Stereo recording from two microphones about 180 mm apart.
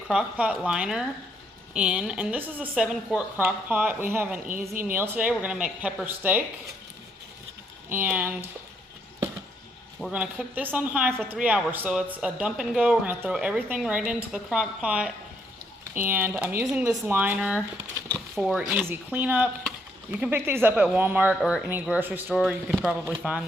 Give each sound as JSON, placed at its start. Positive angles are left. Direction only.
{"t": 0.1, "sound": "a woman's voice", "side_deg": -5}
{"t": 4.7, "sound": "speech", "side_deg": -50}
{"t": 4.9, "sound": "a woman's voice", "side_deg": -10}
{"t": 7.9, "sound": "a woman's voice", "side_deg": -10}
{"t": 10.0, "sound": "a woman's voice", "side_deg": -5}